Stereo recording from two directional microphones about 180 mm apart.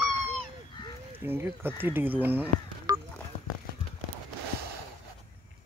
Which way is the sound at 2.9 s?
25° right (ahead or behind).